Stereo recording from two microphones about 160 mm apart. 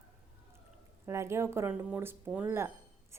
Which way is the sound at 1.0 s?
15° right (ahead or behind).